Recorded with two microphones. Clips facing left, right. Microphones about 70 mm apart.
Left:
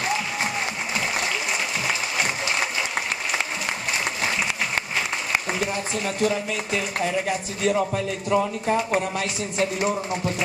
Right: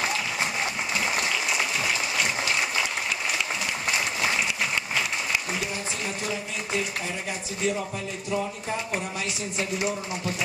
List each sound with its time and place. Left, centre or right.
6.0 s speech: left